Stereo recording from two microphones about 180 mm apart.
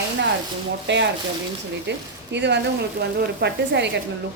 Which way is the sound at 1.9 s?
70° right (ahead or behind).